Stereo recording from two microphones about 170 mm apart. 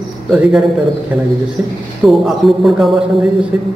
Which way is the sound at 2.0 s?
Centre (ahead or behind).